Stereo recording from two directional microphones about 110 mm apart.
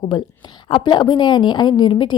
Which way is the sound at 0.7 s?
45° left (ahead or behind).